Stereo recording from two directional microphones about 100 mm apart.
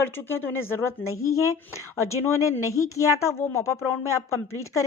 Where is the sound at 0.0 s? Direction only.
25° left (ahead or behind).